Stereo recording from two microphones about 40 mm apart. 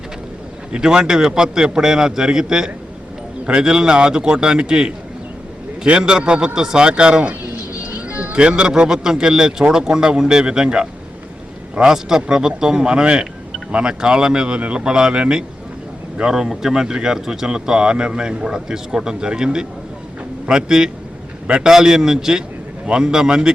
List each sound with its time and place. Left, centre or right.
0.7 s a man's voice: centre
7.9 s music: right
8.9 s a man's voice: centre